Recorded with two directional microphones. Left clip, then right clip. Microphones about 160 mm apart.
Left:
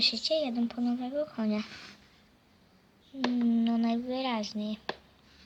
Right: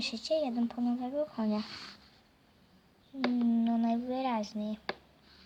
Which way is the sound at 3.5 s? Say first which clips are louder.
Left 1 dB; 15° left (ahead or behind).